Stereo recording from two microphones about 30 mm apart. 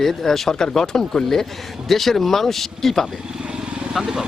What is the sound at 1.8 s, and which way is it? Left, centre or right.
A man's voice, centre.